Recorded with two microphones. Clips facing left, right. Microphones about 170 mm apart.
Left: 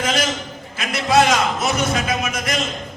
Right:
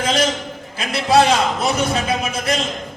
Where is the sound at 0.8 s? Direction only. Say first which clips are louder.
Right 2 dB; 30° right (ahead or behind).